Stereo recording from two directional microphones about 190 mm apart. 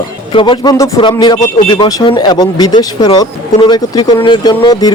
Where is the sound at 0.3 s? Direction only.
25° left (ahead or behind).